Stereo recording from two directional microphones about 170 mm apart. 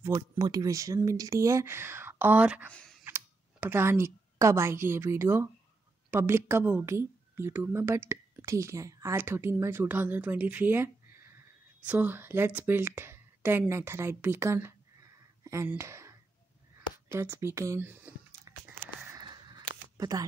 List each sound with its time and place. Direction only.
0.4 s speech: 20° right (ahead or behind)
2.7 s computer keyboard: 5° left (ahead or behind)
3.0 s speech: 10° right (ahead or behind)
19.0 s a sound: 25° right (ahead or behind)
20.0 s speech: 20° right (ahead or behind)